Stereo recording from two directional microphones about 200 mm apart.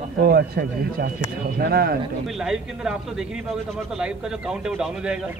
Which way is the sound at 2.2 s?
Centre (ahead or behind).